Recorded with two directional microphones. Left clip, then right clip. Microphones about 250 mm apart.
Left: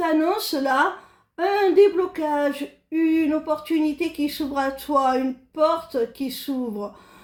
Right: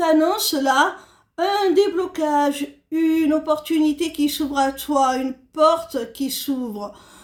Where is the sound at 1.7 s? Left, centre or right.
Right.